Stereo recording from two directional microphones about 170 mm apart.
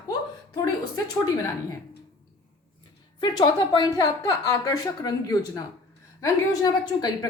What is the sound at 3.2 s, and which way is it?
Speech, 25° left (ahead or behind).